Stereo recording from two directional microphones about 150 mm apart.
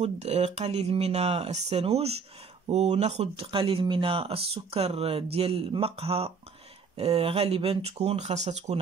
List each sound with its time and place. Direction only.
0.0 s speech: 45° right (ahead or behind)